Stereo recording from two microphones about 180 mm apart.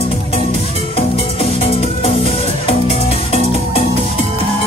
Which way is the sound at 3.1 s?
35° left (ahead or behind).